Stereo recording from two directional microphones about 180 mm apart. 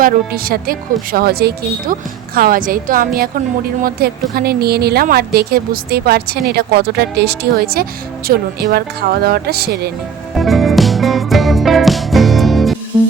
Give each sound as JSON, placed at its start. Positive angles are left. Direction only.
{"t": 0.0, "sound": "a woman's voice", "side_deg": -55}
{"t": 10.3, "sound": "music", "side_deg": 0}